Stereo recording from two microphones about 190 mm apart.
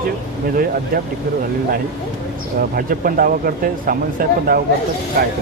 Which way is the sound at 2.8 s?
50° right (ahead or behind).